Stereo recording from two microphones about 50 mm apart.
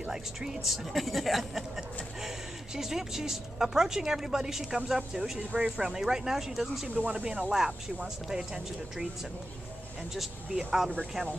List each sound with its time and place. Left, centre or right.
0.1 s speech: centre
6.9 s speech: right
7.2 s speech: centre
10.5 s speech: centre